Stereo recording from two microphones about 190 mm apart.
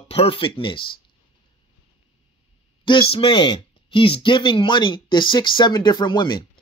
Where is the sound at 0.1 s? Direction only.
30° left (ahead or behind).